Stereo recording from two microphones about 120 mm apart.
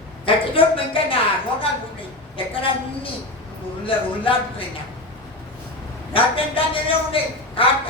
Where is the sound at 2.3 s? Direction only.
50° left (ahead or behind).